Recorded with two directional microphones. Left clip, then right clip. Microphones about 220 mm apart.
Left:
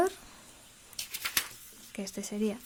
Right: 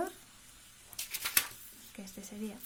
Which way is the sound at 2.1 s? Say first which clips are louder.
Left 12 dB; 45° left (ahead or behind).